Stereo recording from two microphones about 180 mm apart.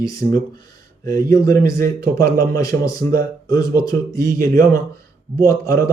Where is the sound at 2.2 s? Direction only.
55° right (ahead or behind).